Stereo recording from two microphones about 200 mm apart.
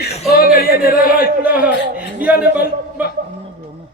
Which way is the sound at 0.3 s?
50° left (ahead or behind).